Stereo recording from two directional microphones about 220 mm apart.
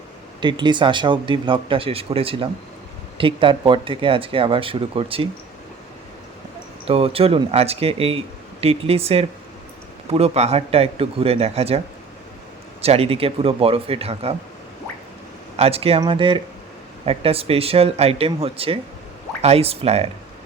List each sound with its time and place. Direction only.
0.3 s speech: 20° right (ahead or behind)
6.8 s speech: 25° right (ahead or behind)
12.8 s speech: 25° right (ahead or behind)
15.5 s speech: 25° right (ahead or behind)